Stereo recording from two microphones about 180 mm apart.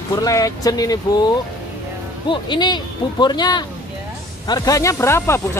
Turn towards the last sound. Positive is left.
turn(degrees=15)  # may be behind; listen again after turning